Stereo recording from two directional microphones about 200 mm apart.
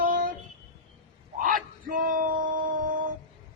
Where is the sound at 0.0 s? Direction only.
45° right (ahead or behind).